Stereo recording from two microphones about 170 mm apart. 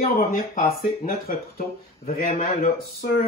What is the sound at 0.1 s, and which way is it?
Speech, 55° left (ahead or behind).